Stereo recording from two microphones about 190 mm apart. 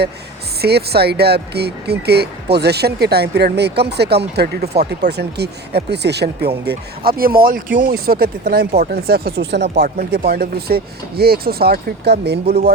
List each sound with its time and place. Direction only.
0.6 s speech: 55° right (ahead or behind)
9.7 s speech: 50° right (ahead or behind)